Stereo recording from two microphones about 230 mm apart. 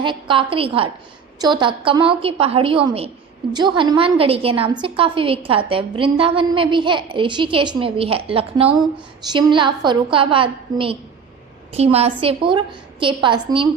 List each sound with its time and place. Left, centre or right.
0.0 s a woman's voice: right